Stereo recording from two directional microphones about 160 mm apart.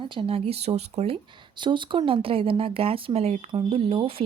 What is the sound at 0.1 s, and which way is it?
Speech, 35° right (ahead or behind).